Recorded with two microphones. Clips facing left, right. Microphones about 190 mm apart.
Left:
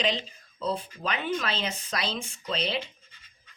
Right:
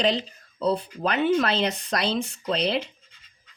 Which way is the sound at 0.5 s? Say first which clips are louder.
Right 6 dB; 65° right (ahead or behind).